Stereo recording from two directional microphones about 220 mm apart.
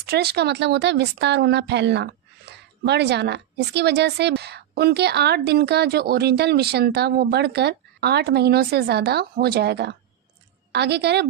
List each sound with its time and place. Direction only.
0.0 s a woman's voice: 45° right (ahead or behind)